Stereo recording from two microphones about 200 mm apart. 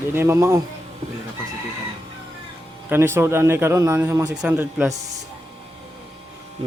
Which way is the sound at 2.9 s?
10° right (ahead or behind).